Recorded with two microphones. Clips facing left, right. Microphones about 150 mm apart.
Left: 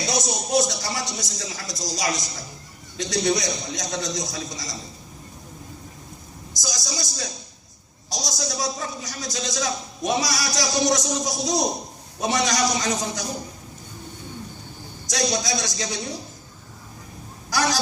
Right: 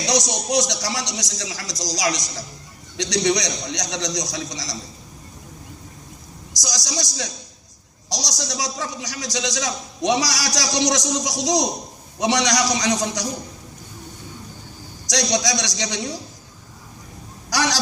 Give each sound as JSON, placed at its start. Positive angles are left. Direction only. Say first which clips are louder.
{"t": 0.0, "sound": "a man's voice", "louder": "right 3 dB", "side_deg": -90}
{"t": 6.5, "sound": "a man's voice", "louder": "right 2 dB", "side_deg": -90}
{"t": 15.0, "sound": "a man's voice", "louder": "right 3 dB", "side_deg": -90}
{"t": 17.5, "sound": "speech", "louder": "right 1 dB", "side_deg": -90}